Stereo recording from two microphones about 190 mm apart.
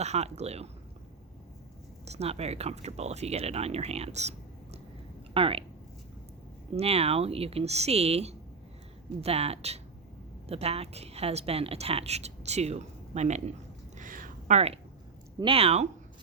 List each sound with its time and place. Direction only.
0.0 s a woman's voice: 35° right (ahead or behind)
2.0 s a woman's voice: 35° right (ahead or behind)
6.7 s a woman's voice: 30° right (ahead or behind)
13.9 s a sound: 45° right (ahead or behind)
15.4 s a woman's voice: 30° right (ahead or behind)